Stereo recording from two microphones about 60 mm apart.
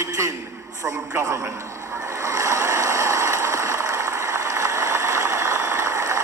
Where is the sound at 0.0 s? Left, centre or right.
Right.